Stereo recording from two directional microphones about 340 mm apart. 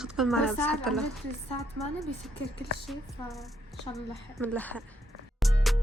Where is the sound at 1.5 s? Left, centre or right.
Centre.